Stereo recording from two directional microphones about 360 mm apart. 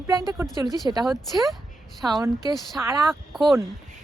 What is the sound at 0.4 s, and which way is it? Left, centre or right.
A woman's voice, centre.